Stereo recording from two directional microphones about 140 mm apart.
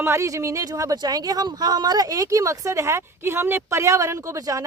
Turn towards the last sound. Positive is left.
turn(degrees=-25)  # may be behind; listen again after turning